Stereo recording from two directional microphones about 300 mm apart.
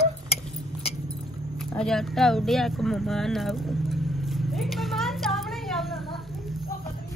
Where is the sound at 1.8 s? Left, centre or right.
Centre.